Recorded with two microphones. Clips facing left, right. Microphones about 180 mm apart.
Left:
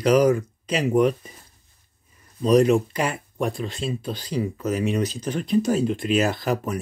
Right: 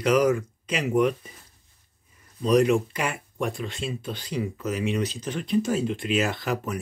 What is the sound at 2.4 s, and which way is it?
Speech, 35° left (ahead or behind).